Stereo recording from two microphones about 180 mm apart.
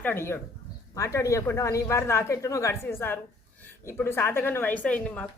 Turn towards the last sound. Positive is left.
turn(degrees=5)  # may be behind; listen again after turning